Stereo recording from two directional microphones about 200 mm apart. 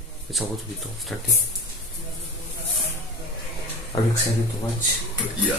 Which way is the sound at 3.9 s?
20° left (ahead or behind).